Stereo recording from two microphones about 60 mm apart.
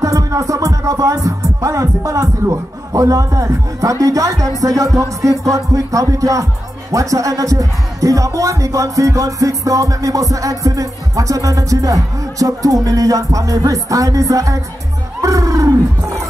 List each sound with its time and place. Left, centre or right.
0.0 s music: right
5.2 s speech: right
15.2 s roaring cats: right